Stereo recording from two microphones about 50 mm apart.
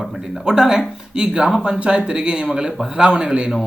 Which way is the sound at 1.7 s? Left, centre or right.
Right.